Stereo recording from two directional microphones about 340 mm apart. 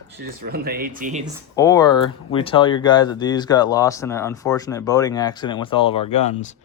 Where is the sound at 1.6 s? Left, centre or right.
Centre.